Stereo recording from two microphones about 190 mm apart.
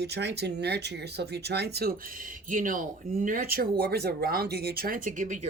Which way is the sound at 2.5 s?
45° right (ahead or behind).